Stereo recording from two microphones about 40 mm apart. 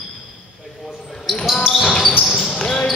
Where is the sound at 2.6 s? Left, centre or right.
Centre.